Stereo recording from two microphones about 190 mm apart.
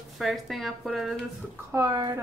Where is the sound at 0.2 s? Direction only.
Centre (ahead or behind).